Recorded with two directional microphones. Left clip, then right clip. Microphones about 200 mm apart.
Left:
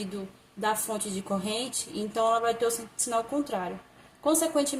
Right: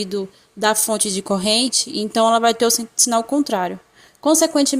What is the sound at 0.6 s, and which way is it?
Speech, 50° right (ahead or behind).